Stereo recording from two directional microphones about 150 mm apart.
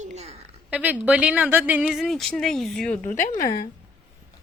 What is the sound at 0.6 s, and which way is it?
Speech, 10° right (ahead or behind).